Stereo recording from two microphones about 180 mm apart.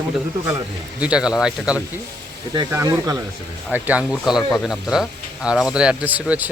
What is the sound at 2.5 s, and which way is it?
Speech, 20° right (ahead or behind).